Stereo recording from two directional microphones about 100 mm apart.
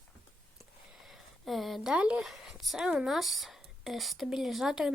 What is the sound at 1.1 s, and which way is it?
A woman's voice, centre (ahead or behind).